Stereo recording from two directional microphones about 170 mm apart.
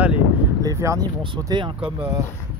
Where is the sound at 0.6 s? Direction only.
20° right (ahead or behind).